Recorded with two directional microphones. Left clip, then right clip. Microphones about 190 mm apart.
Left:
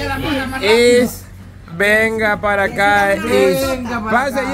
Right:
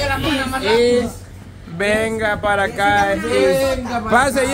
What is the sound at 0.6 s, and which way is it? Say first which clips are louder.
Speech: left 4 dB; 45° left (ahead or behind).